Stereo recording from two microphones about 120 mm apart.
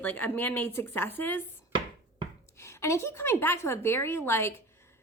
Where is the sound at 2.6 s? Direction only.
20° left (ahead or behind).